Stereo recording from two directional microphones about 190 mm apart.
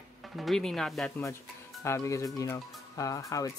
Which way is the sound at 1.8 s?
15° left (ahead or behind).